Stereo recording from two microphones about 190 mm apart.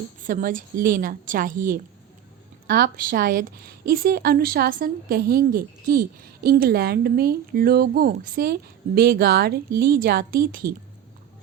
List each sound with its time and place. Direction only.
0.2 s a woman's voice: 45° right (ahead or behind)